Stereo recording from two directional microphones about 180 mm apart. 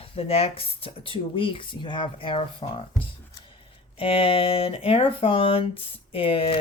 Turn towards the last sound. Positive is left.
turn(degrees=30)  # may be behind; listen again after turning